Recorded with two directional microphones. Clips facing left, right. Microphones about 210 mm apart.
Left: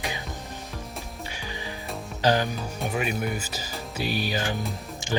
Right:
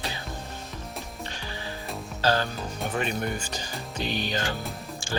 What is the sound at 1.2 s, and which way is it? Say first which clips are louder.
Music: left 1 dB; 10° left (ahead or behind).